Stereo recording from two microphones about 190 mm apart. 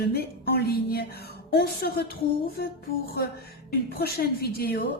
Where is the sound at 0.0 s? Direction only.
55° left (ahead or behind).